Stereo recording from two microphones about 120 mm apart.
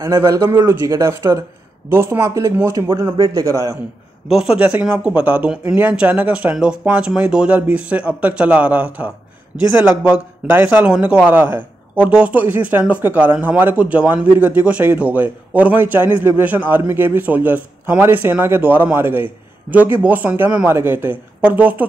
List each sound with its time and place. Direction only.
0.0 s speech: 25° right (ahead or behind)
4.3 s speech: 5° right (ahead or behind)
4.6 s a man's voice: 15° right (ahead or behind)